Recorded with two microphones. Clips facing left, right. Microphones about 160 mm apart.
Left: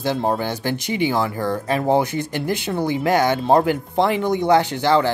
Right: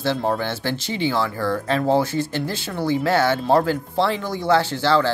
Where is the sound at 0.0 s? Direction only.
15° left (ahead or behind).